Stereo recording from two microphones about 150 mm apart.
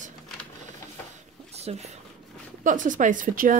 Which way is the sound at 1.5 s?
45° right (ahead or behind).